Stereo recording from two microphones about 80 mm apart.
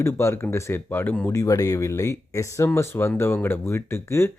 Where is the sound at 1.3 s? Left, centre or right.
Left.